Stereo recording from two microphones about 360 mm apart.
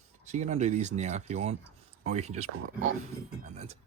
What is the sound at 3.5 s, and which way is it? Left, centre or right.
Speech, centre.